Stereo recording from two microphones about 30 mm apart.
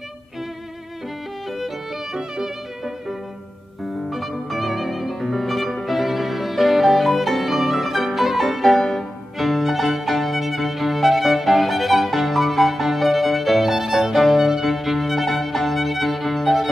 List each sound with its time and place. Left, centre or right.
2.1 s violin: right
3.8 s music: centre
14.1 s violin: centre